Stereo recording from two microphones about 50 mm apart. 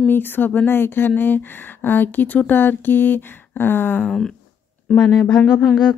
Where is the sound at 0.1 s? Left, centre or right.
Left.